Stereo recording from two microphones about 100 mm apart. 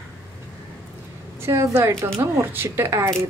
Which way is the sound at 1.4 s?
25° right (ahead or behind).